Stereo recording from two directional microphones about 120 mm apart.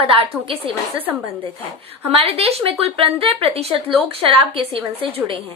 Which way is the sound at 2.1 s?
55° right (ahead or behind).